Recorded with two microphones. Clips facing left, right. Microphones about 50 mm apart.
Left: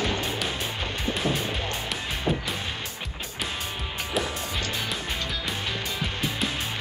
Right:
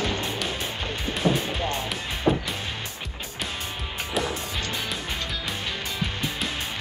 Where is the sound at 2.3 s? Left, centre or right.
Centre.